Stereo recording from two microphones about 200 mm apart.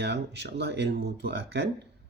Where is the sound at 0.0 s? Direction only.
60° right (ahead or behind).